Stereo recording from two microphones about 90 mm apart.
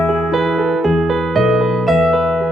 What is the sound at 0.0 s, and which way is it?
Music, centre (ahead or behind).